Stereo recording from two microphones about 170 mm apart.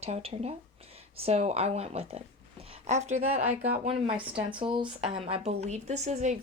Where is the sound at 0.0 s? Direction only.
35° right (ahead or behind).